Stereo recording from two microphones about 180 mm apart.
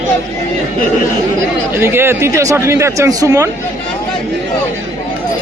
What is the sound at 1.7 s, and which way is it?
Speech, 15° right (ahead or behind).